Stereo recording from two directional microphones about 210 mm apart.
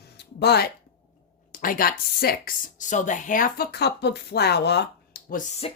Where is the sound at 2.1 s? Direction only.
45° left (ahead or behind).